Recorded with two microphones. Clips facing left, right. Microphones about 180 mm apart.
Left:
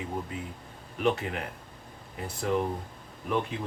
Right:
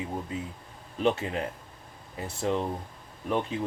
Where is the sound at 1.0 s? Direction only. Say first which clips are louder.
Right 1 dB; 25° right (ahead or behind).